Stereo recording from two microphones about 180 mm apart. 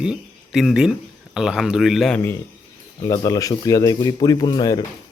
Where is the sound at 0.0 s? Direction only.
5° right (ahead or behind).